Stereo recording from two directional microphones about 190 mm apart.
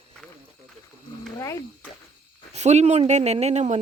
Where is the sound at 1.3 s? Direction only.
15° left (ahead or behind).